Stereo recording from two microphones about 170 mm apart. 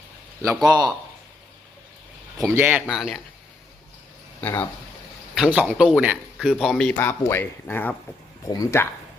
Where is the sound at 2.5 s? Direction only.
5° right (ahead or behind).